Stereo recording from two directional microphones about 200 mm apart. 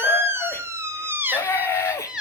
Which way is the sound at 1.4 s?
10° left (ahead or behind).